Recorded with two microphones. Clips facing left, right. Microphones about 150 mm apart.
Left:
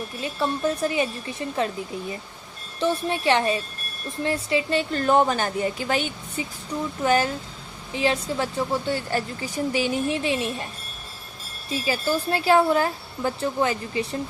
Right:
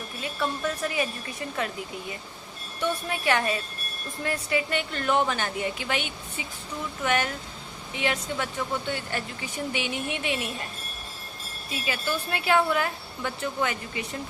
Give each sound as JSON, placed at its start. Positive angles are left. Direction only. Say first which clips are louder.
{"t": 0.2, "sound": "a woman's voice", "louder": "left 4 dB", "side_deg": 30}
{"t": 11.7, "sound": "speech", "louder": "left 6 dB", "side_deg": 35}